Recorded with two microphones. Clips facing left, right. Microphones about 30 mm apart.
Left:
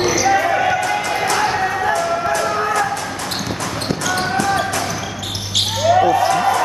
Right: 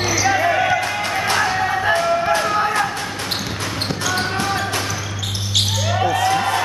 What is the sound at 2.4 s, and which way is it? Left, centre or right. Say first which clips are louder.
Basketball bounce: even; centre.